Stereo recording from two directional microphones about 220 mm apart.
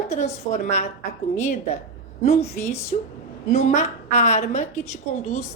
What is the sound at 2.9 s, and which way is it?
A woman's voice, 35° left (ahead or behind).